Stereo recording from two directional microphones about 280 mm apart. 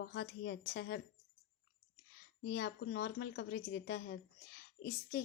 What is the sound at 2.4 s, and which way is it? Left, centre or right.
A woman's voice, left.